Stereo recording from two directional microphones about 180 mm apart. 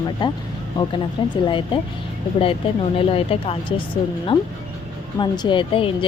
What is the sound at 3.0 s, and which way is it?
Speech, 30° left (ahead or behind).